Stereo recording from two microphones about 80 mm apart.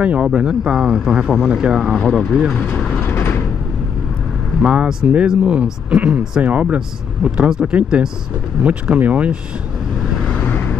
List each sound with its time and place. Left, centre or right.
0.0 s speech: centre
3.2 s vehicle: left
4.6 s speech: centre
10.3 s vehicle: centre